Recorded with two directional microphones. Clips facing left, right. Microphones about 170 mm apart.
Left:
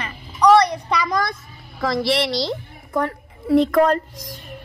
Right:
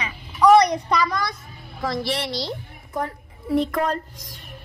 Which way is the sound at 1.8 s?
90° left.